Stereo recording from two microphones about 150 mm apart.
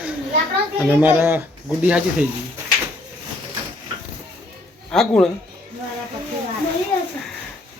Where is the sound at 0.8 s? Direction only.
10° right (ahead or behind).